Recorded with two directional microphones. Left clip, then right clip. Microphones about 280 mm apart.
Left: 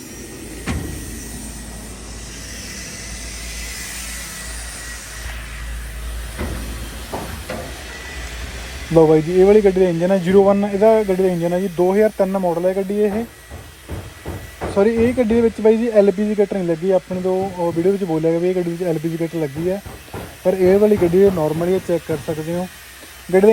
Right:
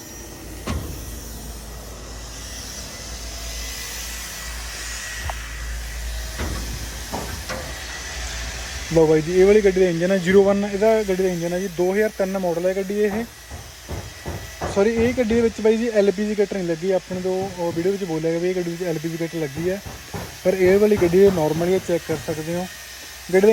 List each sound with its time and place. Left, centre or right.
9.0 s speech: centre
12.4 s speech: centre
12.6 s speech: centre
14.8 s speech: centre